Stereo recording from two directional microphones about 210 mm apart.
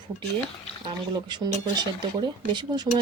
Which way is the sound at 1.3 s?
20° right (ahead or behind).